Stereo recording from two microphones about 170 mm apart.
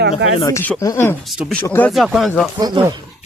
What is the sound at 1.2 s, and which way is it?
Speech, centre (ahead or behind).